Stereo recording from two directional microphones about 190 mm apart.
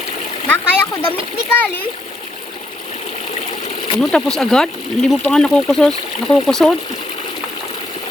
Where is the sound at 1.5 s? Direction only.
10° left (ahead or behind).